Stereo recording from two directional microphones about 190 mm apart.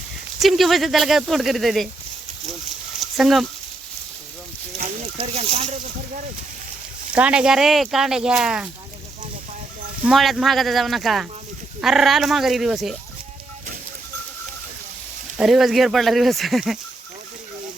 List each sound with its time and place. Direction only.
0.3 s speech: centre (ahead or behind)
3.2 s speech: centre (ahead or behind)
5.1 s speech: 30° right (ahead or behind)
7.2 s speech: 5° right (ahead or behind)
10.1 s speech: centre (ahead or behind)
15.4 s speech: centre (ahead or behind)